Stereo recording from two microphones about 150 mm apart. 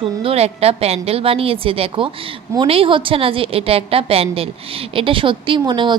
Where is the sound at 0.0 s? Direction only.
40° right (ahead or behind).